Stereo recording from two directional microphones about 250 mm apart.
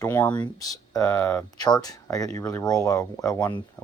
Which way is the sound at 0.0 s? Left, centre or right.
Centre.